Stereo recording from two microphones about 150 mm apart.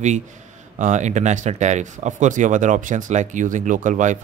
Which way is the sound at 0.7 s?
55° right (ahead or behind).